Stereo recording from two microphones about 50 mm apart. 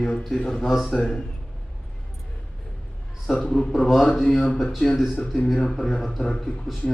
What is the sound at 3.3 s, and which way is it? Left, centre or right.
Speech, left.